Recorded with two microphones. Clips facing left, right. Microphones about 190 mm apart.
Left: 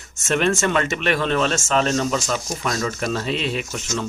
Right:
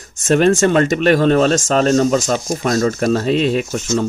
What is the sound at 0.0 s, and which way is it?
Speech, 40° right (ahead or behind).